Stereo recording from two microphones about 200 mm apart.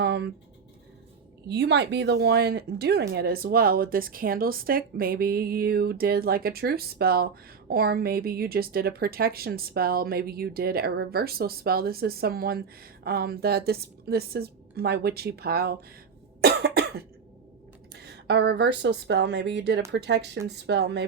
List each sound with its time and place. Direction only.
0.0 s scratch: 55° right (ahead or behind)
1.5 s speech: 55° right (ahead or behind)
16.4 s cough: 55° right (ahead or behind)
17.9 s speech: 55° right (ahead or behind)